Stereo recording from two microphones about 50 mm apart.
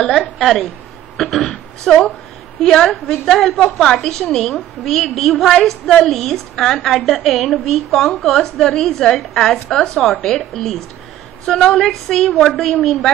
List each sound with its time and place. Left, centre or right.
0.4 s a woman's voice: centre
1.1 s a sound: centre
1.9 s a woman's voice: centre